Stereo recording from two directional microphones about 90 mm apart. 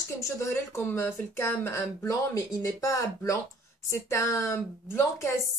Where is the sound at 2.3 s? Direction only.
40° left (ahead or behind).